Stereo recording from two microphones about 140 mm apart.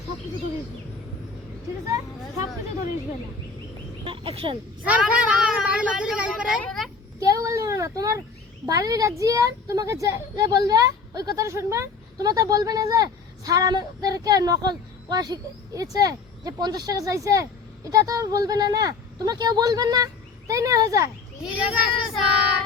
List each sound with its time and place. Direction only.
4.0 s speech: 40° right (ahead or behind)
4.8 s a woman's voice: 10° right (ahead or behind)
7.2 s a sound: 25° right (ahead or behind)
8.6 s a woman's voice: 25° right (ahead or behind)
21.4 s child singing: 10° right (ahead or behind)